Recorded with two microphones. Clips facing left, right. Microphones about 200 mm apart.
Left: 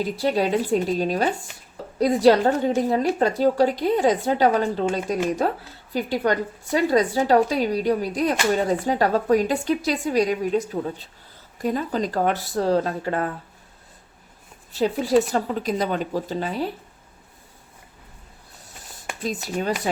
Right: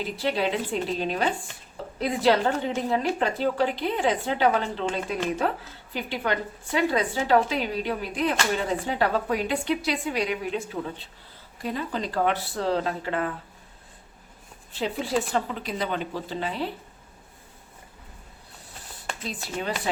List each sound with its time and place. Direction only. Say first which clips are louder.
0.0 s a woman's voice: left 4 dB; 40° left (ahead or behind)
14.7 s a woman's voice: left 7 dB; 40° left (ahead or behind)
19.2 s a woman's voice: left 6 dB; 45° left (ahead or behind)